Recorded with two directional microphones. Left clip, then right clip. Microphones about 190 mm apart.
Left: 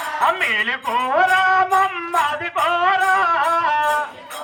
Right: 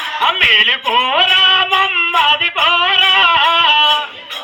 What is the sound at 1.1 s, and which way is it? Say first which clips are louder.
Music: right 3 dB; 30° left (ahead or behind).